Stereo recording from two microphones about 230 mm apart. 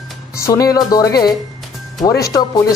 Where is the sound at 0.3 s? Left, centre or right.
Centre.